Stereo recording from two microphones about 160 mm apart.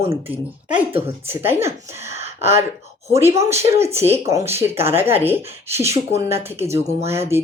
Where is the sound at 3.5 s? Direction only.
40° right (ahead or behind).